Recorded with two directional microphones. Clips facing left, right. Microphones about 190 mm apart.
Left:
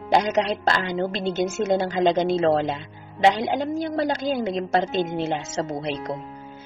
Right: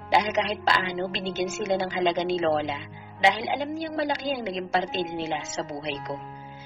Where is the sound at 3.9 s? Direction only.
50° left (ahead or behind).